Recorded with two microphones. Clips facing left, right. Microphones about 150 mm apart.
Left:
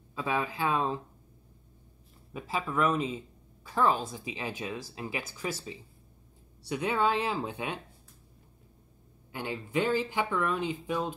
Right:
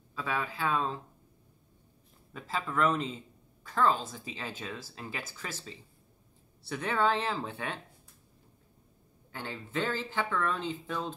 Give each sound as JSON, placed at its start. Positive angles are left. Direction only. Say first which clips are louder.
{"t": 0.1, "sound": "speech", "louder": "left 3 dB", "side_deg": 20}
{"t": 2.3, "sound": "speech", "louder": "left 2 dB", "side_deg": 10}
{"t": 9.3, "sound": "speech", "louder": "left 5 dB", "side_deg": 15}